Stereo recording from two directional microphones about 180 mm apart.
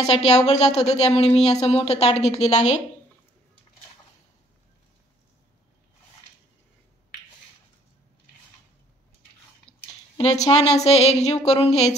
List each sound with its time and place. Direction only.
0.0 s speech: 35° left (ahead or behind)
9.7 s a sound: 5° left (ahead or behind)
10.1 s speech: 35° left (ahead or behind)